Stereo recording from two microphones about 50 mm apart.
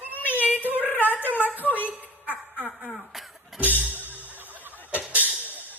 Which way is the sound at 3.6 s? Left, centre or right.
Right.